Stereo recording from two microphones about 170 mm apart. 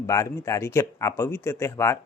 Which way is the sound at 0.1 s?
20° left (ahead or behind).